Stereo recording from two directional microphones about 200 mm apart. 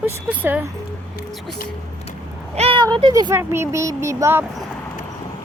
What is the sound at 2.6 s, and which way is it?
Speech, 25° right (ahead or behind).